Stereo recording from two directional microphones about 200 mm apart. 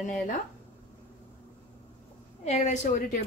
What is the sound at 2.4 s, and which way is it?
Speech, 35° left (ahead or behind).